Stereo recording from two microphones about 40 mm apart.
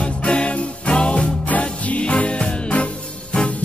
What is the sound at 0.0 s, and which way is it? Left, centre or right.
Music, left.